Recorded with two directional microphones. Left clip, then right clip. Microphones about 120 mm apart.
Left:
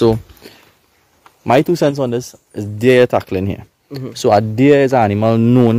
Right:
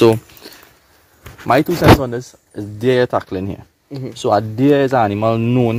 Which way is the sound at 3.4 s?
90° left.